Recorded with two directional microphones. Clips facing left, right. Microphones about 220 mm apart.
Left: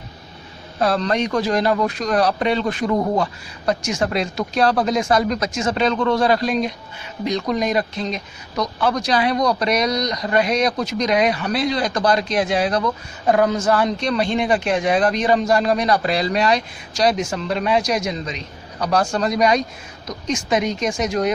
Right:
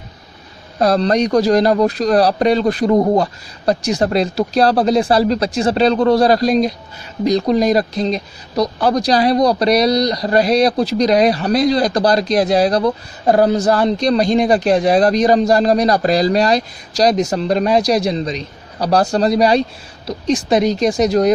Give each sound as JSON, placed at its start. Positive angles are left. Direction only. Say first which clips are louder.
{"t": 0.7, "sound": "speech", "louder": "right 5 dB", "side_deg": -35}